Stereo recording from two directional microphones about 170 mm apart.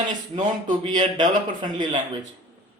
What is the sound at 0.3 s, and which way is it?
Speech, 25° right (ahead or behind).